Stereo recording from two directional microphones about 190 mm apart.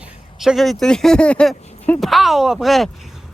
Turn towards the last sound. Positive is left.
turn(degrees=0)  # may be behind; listen again after turning